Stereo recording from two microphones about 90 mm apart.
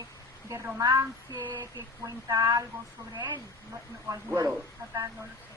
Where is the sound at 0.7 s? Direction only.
35° right (ahead or behind).